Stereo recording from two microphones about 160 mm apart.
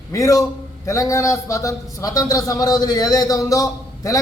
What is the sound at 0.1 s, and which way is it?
A man's voice, 20° left (ahead or behind).